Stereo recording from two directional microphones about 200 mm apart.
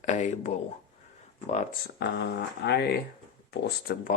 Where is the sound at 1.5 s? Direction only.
40° left (ahead or behind).